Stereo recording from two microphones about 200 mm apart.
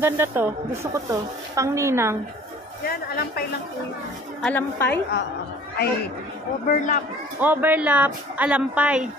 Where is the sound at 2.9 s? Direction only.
50° left (ahead or behind).